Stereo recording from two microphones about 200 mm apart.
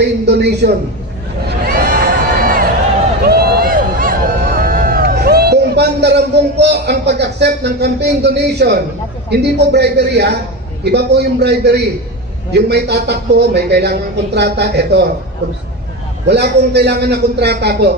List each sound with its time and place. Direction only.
0.0 s a man's voice: 55° right (ahead or behind)
1.5 s a sound: 50° right (ahead or behind)
9.3 s a man's voice: 55° right (ahead or behind)
16.2 s a man's voice: 55° right (ahead or behind)